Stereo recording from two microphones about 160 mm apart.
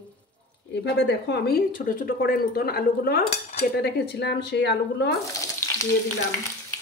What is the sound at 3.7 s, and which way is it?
A woman's voice, 90° left.